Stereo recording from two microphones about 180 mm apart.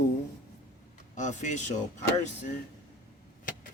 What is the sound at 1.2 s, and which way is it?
Speech, 40° left (ahead or behind).